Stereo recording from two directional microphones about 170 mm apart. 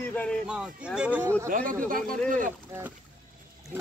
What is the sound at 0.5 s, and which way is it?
Speech, 5° right (ahead or behind).